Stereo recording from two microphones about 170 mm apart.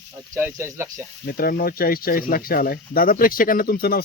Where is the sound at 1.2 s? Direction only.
55° left (ahead or behind).